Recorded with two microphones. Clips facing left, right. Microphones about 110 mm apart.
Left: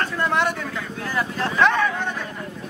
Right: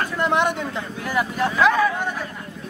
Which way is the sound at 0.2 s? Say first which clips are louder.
Right 3 dB; 15° right (ahead or behind).